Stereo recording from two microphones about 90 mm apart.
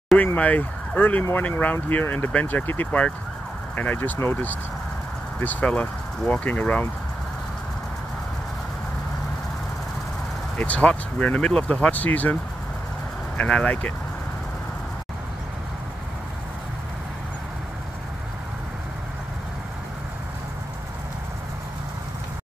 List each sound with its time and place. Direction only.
0.4 s speech: 15° left (ahead or behind)
10.6 s speech: 15° left (ahead or behind)
13.4 s speech: 10° left (ahead or behind)